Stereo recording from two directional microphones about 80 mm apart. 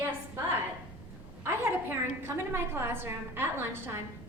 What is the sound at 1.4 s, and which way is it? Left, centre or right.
A woman's voice, right.